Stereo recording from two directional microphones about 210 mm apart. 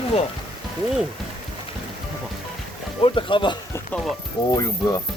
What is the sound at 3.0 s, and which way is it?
A man's voice, 25° left (ahead or behind).